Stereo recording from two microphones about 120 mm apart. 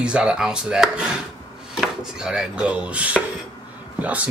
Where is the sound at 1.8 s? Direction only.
5° right (ahead or behind).